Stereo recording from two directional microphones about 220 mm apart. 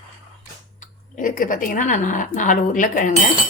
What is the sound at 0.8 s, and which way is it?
Speech, 35° left (ahead or behind).